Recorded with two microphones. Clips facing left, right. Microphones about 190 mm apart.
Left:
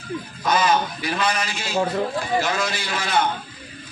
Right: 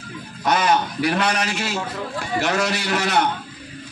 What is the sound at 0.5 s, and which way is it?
A man's voice, 70° right (ahead or behind).